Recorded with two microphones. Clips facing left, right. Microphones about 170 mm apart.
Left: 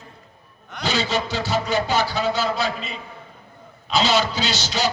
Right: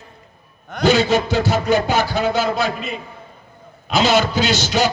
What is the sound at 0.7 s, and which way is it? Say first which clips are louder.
A man's voice: right 8 dB; 50° right (ahead or behind).